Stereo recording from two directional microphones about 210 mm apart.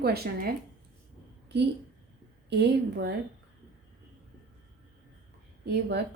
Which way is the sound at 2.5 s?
55° right (ahead or behind).